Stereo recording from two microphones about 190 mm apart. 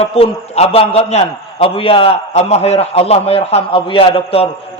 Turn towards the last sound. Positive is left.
turn(degrees=30)  # may be behind; listen again after turning